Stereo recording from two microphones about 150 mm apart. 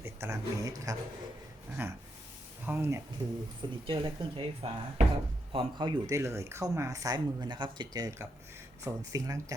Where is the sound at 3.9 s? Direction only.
35° right (ahead or behind).